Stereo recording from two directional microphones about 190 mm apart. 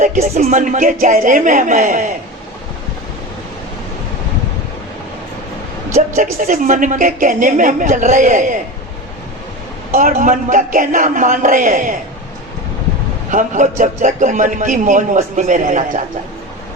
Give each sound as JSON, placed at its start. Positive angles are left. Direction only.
{"t": 0.0, "sound": "a woman's voice", "side_deg": -40}
{"t": 6.1, "sound": "a woman's voice", "side_deg": -45}
{"t": 9.9, "sound": "a woman's voice", "side_deg": -45}
{"t": 13.3, "sound": "a man's voice", "side_deg": -40}